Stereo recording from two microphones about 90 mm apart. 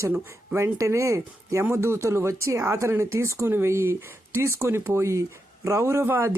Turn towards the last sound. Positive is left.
turn(degrees=-30)  # may be behind; listen again after turning